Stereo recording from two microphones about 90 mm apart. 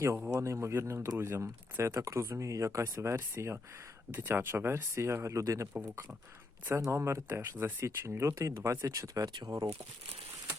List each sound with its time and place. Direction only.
0.3 s speech: 30° right (ahead or behind)
6.8 s speech: 30° right (ahead or behind); by 9.6 s 50° right (ahead or behind)